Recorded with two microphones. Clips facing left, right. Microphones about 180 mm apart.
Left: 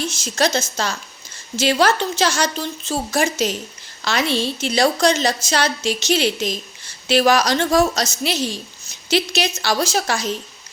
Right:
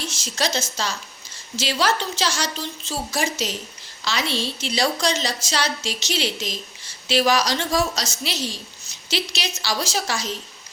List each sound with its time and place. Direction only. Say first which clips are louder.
0.0 s a woman's voice: left 6 dB; 50° left (ahead or behind)